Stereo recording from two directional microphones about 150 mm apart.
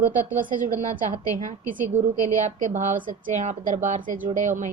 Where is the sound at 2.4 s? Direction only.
55° right (ahead or behind).